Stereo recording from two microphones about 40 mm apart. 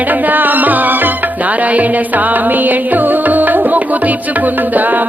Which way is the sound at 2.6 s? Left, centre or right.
Right.